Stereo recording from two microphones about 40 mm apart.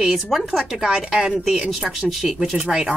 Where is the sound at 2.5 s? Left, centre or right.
Centre.